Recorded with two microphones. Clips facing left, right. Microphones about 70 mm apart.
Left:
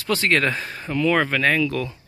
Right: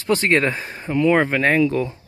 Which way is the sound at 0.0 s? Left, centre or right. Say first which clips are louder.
Right 2 dB; right.